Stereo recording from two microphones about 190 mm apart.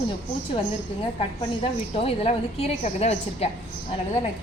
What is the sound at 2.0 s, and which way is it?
A woman's voice, 30° left (ahead or behind).